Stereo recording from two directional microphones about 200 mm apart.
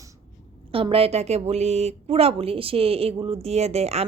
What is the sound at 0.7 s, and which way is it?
Speech, 25° right (ahead or behind).